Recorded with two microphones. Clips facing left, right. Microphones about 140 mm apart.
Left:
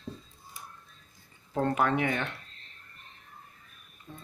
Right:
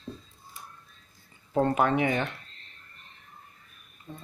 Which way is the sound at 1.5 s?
15° right (ahead or behind).